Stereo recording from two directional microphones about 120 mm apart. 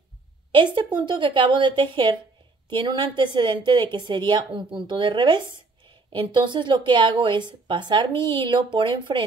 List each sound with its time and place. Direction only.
0.9 s a woman's voice: 40° right (ahead or behind)